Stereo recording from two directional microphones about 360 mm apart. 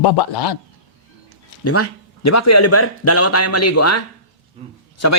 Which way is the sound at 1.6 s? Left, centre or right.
Left.